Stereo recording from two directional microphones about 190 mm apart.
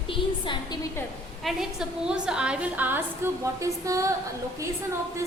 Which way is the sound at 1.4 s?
Centre (ahead or behind).